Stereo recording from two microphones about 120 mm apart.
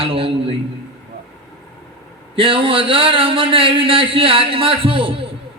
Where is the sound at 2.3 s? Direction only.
50° right (ahead or behind).